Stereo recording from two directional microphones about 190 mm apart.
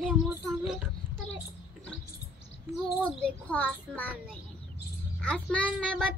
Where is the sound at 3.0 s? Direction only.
5° left (ahead or behind).